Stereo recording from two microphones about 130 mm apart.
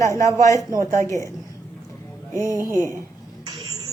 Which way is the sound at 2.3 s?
25° right (ahead or behind).